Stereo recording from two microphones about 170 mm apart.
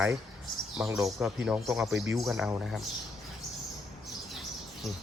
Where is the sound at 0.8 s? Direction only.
15° right (ahead or behind).